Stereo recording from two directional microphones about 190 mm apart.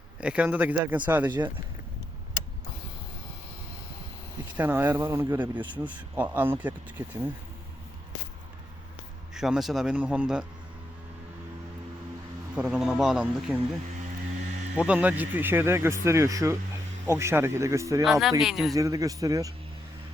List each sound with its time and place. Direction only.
0.2 s speech: 5° right (ahead or behind)
4.5 s speech: 10° right (ahead or behind)
9.3 s speech: centre (ahead or behind)
12.5 s speech: 5° right (ahead or behind)
14.8 s speech: 5° right (ahead or behind)
18.0 s speech: centre (ahead or behind)
18.7 s speech: 15° right (ahead or behind)